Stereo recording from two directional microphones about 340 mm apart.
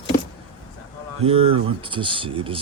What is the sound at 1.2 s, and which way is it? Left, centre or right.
Speech, centre.